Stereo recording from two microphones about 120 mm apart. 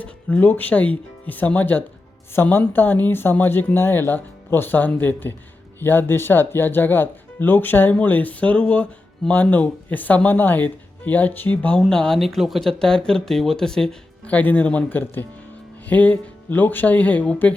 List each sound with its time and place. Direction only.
0.0 s speech: 15° left (ahead or behind)